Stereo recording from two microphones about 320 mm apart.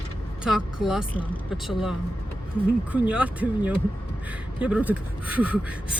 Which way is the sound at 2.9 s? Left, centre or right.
Centre.